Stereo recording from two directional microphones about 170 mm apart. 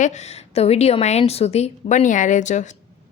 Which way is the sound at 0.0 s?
40° left (ahead or behind).